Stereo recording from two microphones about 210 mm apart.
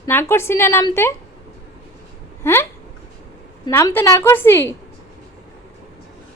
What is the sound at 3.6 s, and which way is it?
A woman's voice, 10° left (ahead or behind).